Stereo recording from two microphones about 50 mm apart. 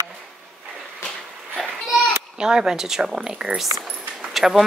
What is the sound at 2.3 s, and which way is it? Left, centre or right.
A woman's voice, centre.